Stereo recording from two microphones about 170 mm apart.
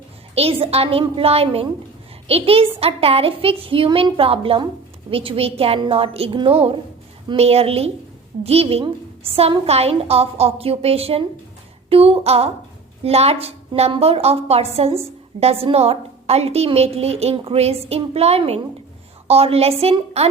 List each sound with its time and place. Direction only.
0.3 s a woman's voice: 35° right (ahead or behind)